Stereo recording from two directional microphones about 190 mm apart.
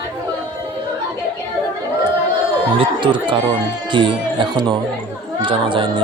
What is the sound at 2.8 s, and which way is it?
Speech, 25° right (ahead or behind).